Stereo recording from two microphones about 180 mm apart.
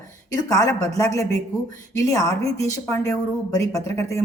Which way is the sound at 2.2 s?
35° right (ahead or behind).